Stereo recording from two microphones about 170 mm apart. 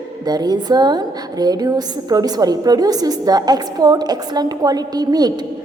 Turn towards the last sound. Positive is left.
turn(degrees=-20)  # may be behind; listen again after turning